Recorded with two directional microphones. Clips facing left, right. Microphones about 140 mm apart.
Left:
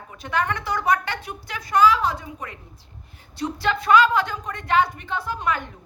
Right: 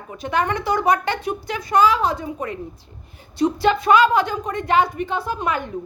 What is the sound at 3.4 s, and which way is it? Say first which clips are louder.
A woman's voice: right 7 dB; 15° right (ahead or behind).